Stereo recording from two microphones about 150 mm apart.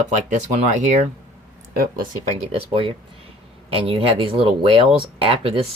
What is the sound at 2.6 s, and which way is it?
Speech, 40° right (ahead or behind).